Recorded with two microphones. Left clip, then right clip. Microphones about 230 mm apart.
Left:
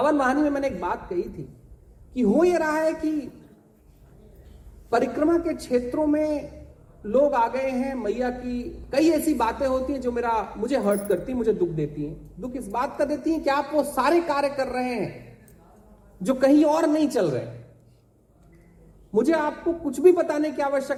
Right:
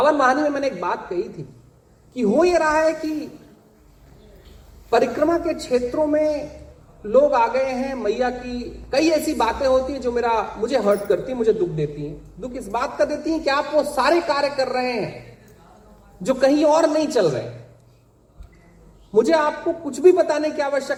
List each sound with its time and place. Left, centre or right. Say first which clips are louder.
0.0 s a man's voice: right 5 dB; left
4.9 s a man's voice: right 4 dB; left
16.2 s a man's voice: right 2 dB; left
19.1 s a man's voice: right 5 dB; left